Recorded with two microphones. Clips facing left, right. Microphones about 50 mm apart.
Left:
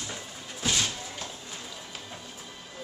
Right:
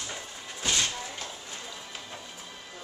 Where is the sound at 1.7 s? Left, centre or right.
Centre.